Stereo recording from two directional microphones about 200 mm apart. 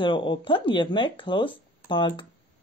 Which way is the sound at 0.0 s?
25° left (ahead or behind).